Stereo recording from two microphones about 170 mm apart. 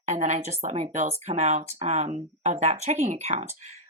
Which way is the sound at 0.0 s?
45° right (ahead or behind).